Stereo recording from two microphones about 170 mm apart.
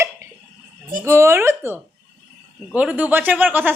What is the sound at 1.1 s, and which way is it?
Speech, 15° right (ahead or behind).